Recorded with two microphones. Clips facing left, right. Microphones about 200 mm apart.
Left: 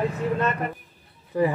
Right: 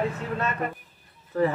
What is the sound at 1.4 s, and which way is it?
Speech, 10° left (ahead or behind).